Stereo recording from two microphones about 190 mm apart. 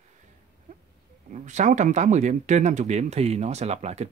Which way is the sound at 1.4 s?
40° right (ahead or behind).